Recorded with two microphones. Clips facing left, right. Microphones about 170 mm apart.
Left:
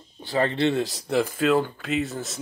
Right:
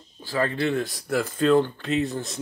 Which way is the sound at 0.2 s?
20° left (ahead or behind).